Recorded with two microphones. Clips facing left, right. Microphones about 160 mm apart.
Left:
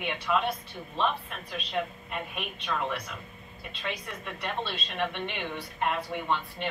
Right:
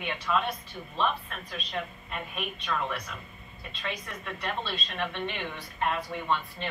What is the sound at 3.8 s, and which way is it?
A woman's voice, 15° left (ahead or behind).